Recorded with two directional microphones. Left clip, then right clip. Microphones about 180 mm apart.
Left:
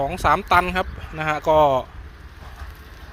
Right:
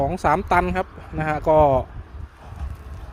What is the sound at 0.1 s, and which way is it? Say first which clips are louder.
Speech: left 2 dB; 35° right (ahead or behind).